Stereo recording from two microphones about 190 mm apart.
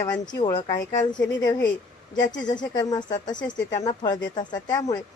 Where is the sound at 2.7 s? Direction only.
20° left (ahead or behind).